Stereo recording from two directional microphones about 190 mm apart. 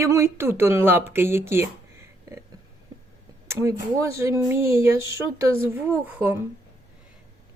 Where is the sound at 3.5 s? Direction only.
15° right (ahead or behind).